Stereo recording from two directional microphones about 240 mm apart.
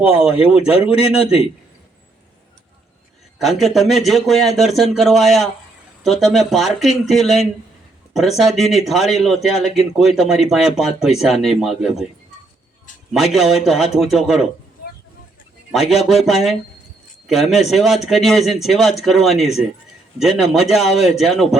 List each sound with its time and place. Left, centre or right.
0.0 s a man's voice: centre
1.2 s a man's voice: left
3.3 s a man's voice: centre
13.1 s a man's voice: centre
15.7 s a man's voice: centre